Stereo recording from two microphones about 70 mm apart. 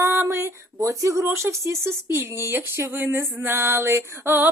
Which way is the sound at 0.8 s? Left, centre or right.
Right.